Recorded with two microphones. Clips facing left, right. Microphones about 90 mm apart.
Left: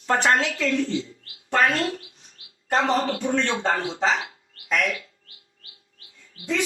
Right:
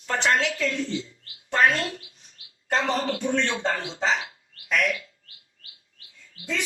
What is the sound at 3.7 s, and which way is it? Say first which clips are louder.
Speech: left 5 dB; 45° left (ahead or behind).